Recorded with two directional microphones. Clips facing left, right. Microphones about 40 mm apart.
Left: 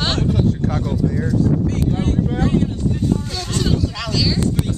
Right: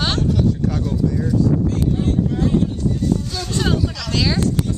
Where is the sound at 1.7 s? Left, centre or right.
Left.